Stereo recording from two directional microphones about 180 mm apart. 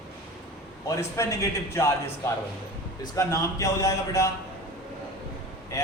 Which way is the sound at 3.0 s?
20° left (ahead or behind).